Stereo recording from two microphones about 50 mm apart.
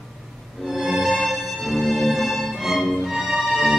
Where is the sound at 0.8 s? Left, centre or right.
Centre.